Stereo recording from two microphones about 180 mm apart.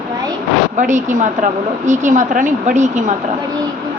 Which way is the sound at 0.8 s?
40° right (ahead or behind).